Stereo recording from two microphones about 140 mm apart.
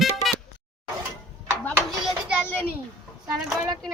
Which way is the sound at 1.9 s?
Centre (ahead or behind).